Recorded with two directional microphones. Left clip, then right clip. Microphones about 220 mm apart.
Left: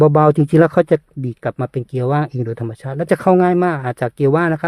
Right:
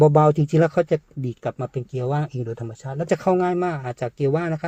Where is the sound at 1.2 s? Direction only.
35° left (ahead or behind).